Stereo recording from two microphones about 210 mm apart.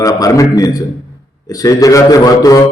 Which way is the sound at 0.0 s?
15° left (ahead or behind).